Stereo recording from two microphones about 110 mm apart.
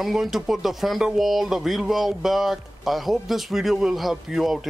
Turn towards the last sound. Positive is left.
turn(degrees=-5)  # may be behind; listen again after turning